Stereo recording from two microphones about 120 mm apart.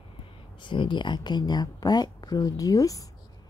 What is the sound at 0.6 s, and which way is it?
Speech, 40° left (ahead or behind).